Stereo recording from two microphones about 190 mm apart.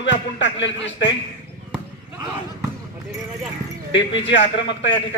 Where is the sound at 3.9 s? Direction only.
70° left (ahead or behind).